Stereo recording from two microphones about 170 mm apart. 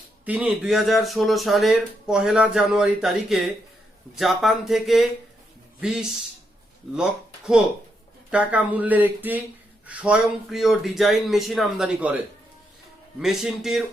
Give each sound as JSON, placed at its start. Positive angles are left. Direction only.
{"t": 0.3, "sound": "speech", "side_deg": -10}
{"t": 13.1, "sound": "speech", "side_deg": -5}